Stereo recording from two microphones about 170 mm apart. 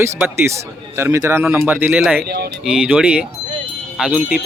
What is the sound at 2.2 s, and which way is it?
Speech, 70° right (ahead or behind).